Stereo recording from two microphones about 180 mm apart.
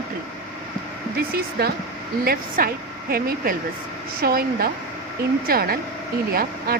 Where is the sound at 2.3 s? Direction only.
55° right (ahead or behind).